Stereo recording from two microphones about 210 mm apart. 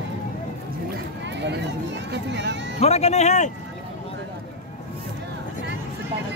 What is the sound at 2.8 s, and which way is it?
Speech, 30° left (ahead or behind).